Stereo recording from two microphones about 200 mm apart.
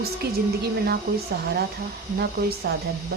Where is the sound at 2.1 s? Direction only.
50° right (ahead or behind).